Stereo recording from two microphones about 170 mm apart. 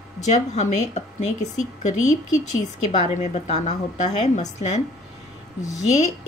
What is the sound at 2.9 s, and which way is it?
A woman's voice, 45° left (ahead or behind).